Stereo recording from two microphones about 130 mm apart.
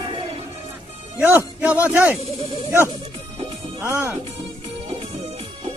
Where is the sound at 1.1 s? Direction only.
15° right (ahead or behind).